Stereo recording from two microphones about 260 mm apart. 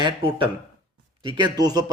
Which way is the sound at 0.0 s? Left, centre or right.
Centre.